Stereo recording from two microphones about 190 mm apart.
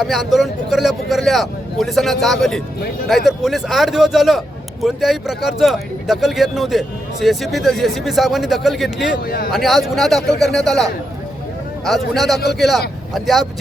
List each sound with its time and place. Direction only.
0.0 s a man's voice: centre (ahead or behind)
9.2 s speech: 55° left (ahead or behind)
9.5 s a man's voice: centre (ahead or behind)
11.9 s a man's voice: centre (ahead or behind)